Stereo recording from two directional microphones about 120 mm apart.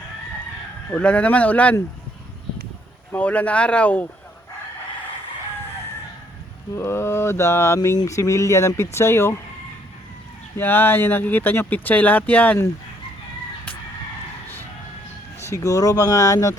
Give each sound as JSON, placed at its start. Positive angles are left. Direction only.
{"t": 0.9, "sound": "speech", "side_deg": 10}
{"t": 3.1, "sound": "speech", "side_deg": 10}
{"t": 6.7, "sound": "speech", "side_deg": 20}
{"t": 10.6, "sound": "speech", "side_deg": 15}
{"t": 15.4, "sound": "speech", "side_deg": 25}